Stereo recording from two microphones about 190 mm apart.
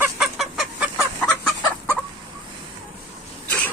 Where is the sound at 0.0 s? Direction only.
Centre (ahead or behind).